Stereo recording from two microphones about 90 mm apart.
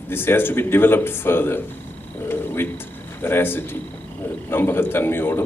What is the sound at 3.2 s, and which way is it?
A man's voice, 25° left (ahead or behind).